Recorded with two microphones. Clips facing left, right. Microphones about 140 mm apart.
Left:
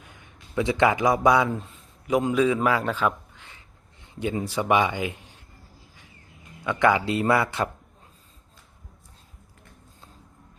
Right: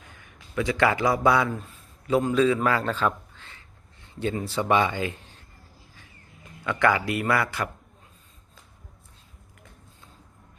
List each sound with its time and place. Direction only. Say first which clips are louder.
0.2 s a man's voice: left 2 dB; 20° left (ahead or behind)
6.7 s speech: left 2 dB; 20° left (ahead or behind)